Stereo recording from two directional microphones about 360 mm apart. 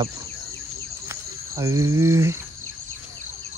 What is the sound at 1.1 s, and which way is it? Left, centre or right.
Speech, centre.